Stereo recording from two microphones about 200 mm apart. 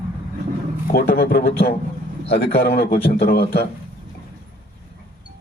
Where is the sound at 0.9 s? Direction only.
50° left (ahead or behind).